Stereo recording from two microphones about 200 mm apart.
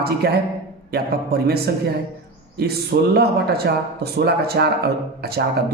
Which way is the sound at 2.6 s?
50° right (ahead or behind).